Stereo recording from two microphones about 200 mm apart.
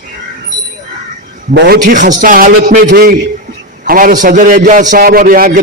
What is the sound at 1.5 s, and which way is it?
Speech, 55° right (ahead or behind).